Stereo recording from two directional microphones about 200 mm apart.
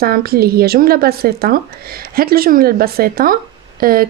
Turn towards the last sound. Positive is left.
turn(degrees=-45)  # may be behind; listen again after turning